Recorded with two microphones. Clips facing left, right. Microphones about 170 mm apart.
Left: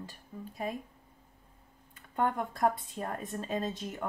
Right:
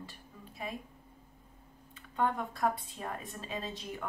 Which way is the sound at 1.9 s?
50° left (ahead or behind).